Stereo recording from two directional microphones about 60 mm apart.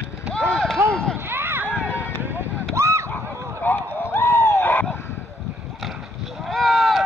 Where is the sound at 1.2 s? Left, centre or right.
Right.